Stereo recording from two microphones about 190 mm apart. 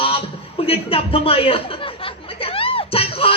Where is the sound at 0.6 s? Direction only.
30° left (ahead or behind).